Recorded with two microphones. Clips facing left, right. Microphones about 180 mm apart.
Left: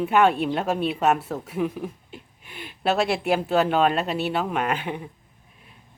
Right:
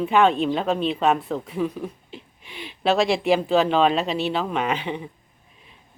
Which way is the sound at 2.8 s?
5° left (ahead or behind).